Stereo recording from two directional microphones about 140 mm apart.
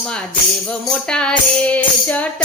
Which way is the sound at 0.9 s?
5° left (ahead or behind).